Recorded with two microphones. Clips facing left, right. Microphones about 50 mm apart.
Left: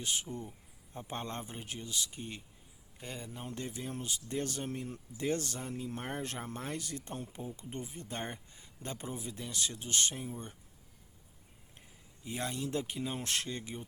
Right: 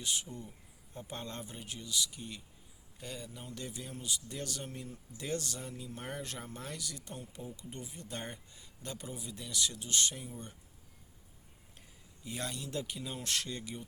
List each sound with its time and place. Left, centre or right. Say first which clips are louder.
0.0 s speech: left 1 dB; left
12.2 s speech: left 3 dB; left